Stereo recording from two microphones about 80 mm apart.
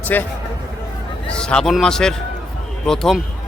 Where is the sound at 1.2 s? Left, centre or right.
Centre.